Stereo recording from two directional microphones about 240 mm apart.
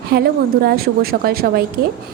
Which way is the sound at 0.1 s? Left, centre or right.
Right.